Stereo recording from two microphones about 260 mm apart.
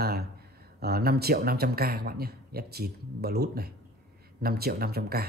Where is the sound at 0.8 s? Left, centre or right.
Right.